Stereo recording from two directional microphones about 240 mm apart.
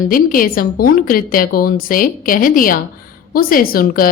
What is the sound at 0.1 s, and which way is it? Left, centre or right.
A woman's voice, left.